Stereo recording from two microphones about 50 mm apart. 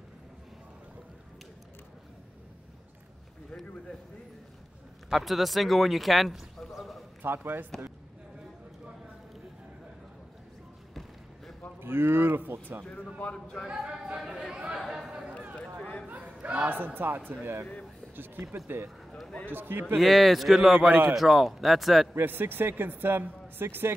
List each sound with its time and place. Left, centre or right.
5.1 s speech: centre
7.2 s speech: right
11.8 s speech: right
13.2 s a man's voice: centre
13.7 s speech: centre
14.8 s speech: centre
15.8 s chatter: left
16.1 s chatter: right
16.6 s speech: right
20.0 s speech: centre
22.2 s speech: right